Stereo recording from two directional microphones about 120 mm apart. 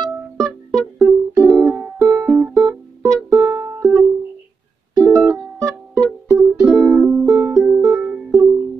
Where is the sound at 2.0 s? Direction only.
30° right (ahead or behind).